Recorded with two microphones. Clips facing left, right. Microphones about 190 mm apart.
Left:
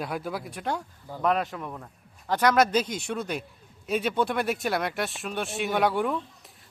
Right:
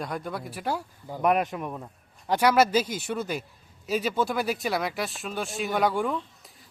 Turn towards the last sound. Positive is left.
turn(degrees=0)  # may be behind; listen again after turning